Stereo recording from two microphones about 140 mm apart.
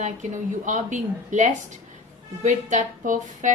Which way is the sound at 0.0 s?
60° right (ahead or behind).